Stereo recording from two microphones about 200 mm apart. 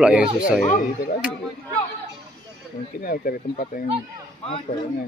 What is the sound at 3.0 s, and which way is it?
Speech, 45° left (ahead or behind).